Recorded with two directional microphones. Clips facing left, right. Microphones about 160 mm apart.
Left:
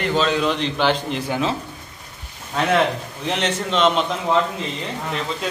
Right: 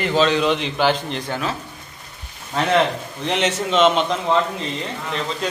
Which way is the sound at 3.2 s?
Centre (ahead or behind).